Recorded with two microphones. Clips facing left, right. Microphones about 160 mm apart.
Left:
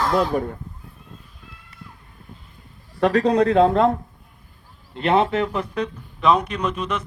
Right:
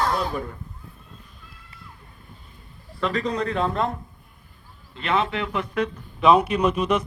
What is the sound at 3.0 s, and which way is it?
Speech, 70° left (ahead or behind).